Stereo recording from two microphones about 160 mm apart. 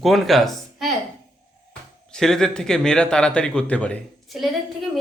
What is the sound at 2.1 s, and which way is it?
Speech, 5° left (ahead or behind).